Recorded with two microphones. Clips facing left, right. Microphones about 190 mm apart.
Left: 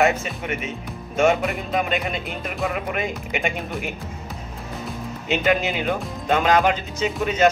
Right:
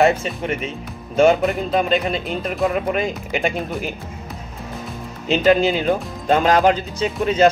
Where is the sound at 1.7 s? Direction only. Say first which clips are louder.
Right 3 dB; 35° right (ahead or behind).